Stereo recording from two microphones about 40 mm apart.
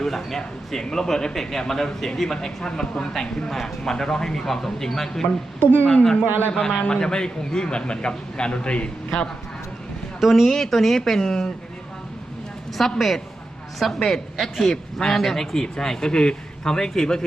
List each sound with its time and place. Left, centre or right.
0.0 s a man's voice: centre
5.8 s a woman's voice: left
10.2 s a man's voice: centre
12.7 s a woman's voice: centre